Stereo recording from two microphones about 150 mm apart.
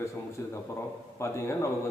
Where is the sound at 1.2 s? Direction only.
20° left (ahead or behind).